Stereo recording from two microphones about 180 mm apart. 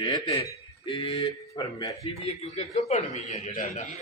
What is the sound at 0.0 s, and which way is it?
A man's voice, 20° left (ahead or behind).